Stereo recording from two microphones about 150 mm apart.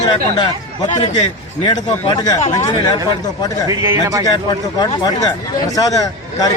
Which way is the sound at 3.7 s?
20° right (ahead or behind).